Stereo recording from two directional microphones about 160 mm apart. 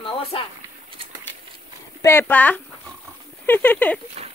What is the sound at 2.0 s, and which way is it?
Speech, 10° left (ahead or behind).